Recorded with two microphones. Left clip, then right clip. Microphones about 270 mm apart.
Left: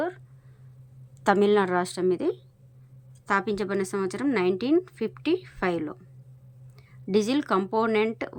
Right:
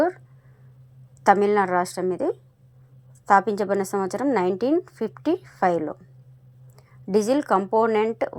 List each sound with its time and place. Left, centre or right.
1.2 s a woman's voice: left